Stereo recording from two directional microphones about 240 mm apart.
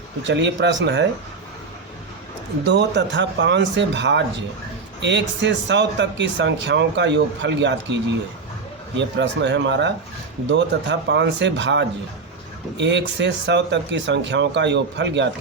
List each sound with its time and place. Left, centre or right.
0.3 s a man's voice: right
2.6 s a man's voice: right
9.0 s a man's voice: right